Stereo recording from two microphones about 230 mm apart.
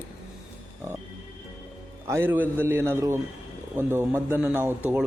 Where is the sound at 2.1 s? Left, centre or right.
Centre.